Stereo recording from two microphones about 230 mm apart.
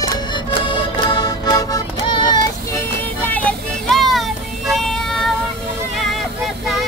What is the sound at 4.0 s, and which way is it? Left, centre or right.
Child singing, centre.